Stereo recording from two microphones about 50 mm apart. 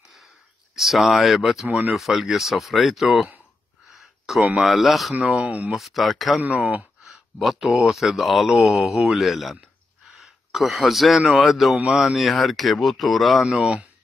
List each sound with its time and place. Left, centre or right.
0.7 s speech: centre
5.2 s speech: centre
5.7 s speech: centre
7.1 s a sound: centre
7.6 s speech: centre
13.5 s speech: centre